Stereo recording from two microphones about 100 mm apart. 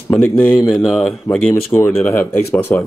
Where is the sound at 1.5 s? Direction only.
25° left (ahead or behind).